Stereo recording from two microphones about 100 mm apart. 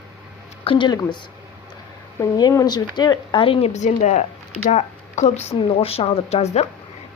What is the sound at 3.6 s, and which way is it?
Speech, 90° left.